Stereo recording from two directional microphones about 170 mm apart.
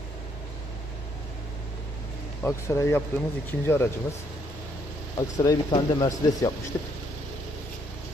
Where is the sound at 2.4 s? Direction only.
15° left (ahead or behind).